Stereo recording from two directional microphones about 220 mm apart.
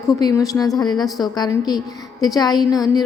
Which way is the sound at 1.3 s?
20° left (ahead or behind).